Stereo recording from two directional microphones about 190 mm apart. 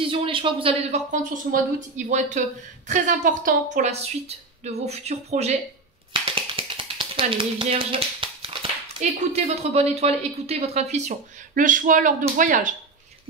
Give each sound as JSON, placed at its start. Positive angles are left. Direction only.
{"t": 0.0, "sound": "speech", "side_deg": -25}
{"t": 6.2, "sound": "tap", "side_deg": -25}
{"t": 9.2, "sound": "speech", "side_deg": -35}